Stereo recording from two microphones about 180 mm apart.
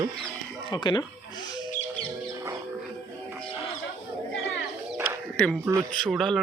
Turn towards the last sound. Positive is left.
turn(degrees=0)  # may be behind; listen again after turning